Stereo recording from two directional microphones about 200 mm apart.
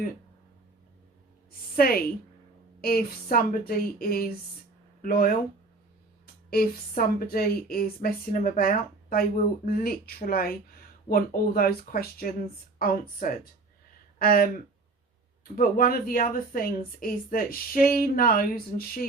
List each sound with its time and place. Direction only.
1.7 s a woman's voice: 45° left (ahead or behind)
6.5 s a woman's voice: 50° left (ahead or behind)
15.5 s a woman's voice: 45° left (ahead or behind)